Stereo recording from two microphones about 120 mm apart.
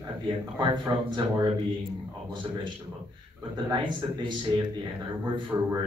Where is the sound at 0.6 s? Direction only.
35° right (ahead or behind).